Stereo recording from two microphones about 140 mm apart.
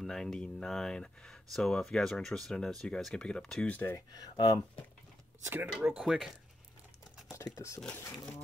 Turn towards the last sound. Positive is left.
turn(degrees=25)  # may be behind; listen again after turning